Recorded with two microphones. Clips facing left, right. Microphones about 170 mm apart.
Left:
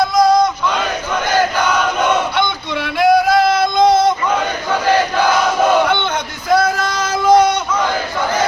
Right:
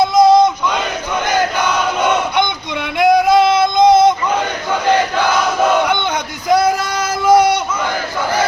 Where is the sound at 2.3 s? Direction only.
15° right (ahead or behind).